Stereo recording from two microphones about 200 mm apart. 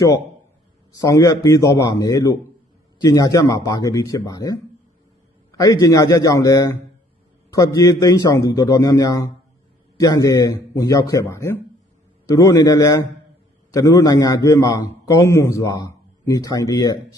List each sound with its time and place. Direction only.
0.9 s speech: 15° left (ahead or behind)